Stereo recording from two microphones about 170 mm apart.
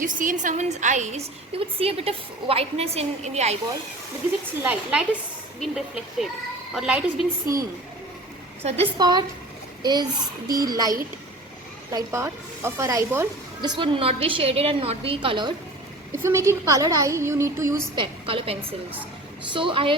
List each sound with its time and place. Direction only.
0.0 s a woman's voice: 50° right (ahead or behind)
4.6 s a woman's voice: 5° right (ahead or behind)
8.6 s a woman's voice: 40° right (ahead or behind)
9.0 s a child's voice: 25° right (ahead or behind)
13.6 s a woman's voice: 30° right (ahead or behind)
16.1 s a woman's voice: 15° right (ahead or behind)
17.9 s a woman's voice: 30° right (ahead or behind)
19.5 s a woman's voice: 30° right (ahead or behind)